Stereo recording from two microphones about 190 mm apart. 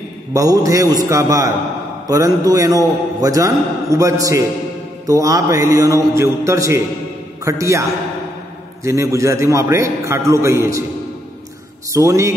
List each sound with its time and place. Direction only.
0.3 s a man's voice: 15° right (ahead or behind)
8.8 s a man's voice: 15° right (ahead or behind)
11.9 s a man's voice: 15° right (ahead or behind)